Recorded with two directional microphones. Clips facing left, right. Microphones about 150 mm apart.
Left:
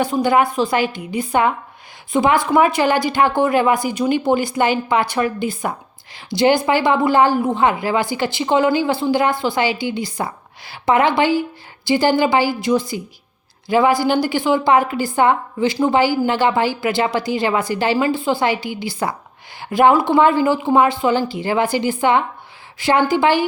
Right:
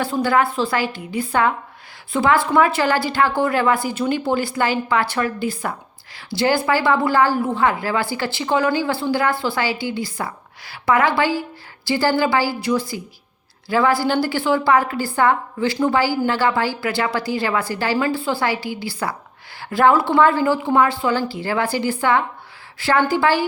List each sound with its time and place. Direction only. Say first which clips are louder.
0.0 s a woman's voice: left 3 dB; 20° left (ahead or behind)